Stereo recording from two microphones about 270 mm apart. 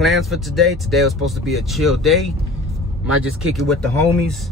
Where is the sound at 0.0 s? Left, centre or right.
Centre.